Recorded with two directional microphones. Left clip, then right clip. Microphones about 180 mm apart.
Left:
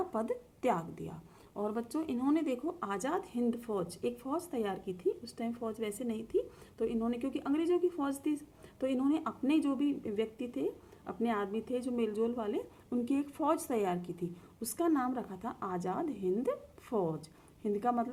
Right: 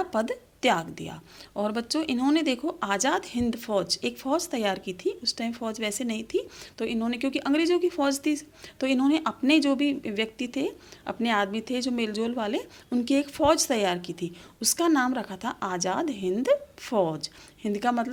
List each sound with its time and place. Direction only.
0.3 s speech: 30° right (ahead or behind)